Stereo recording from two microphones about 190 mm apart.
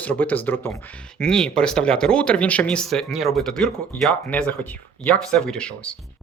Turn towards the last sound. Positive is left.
turn(degrees=5)  # may be behind; listen again after turning